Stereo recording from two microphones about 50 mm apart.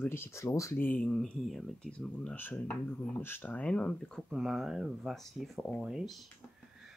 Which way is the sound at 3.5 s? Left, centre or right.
Left.